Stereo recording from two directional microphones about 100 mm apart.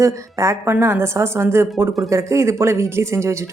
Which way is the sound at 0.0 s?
30° right (ahead or behind).